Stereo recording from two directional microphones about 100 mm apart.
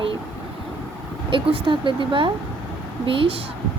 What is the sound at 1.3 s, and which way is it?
Speech, 60° right (ahead or behind).